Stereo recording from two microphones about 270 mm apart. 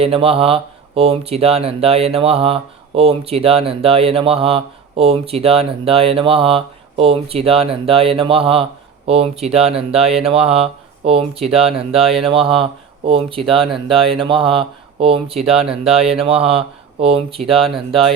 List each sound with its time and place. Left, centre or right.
0.0 s speech: right